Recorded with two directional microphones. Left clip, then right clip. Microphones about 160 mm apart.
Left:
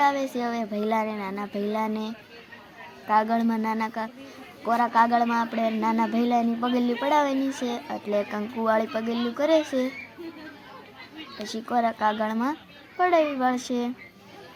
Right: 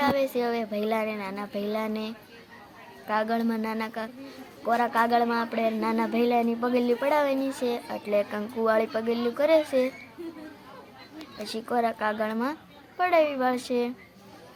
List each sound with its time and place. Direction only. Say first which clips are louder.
0.0 s speech: left 1 dB; 15° left (ahead or behind)
11.4 s speech: left 2 dB; 10° left (ahead or behind)